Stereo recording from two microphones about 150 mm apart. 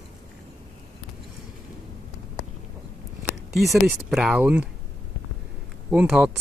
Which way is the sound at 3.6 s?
Centre (ahead or behind).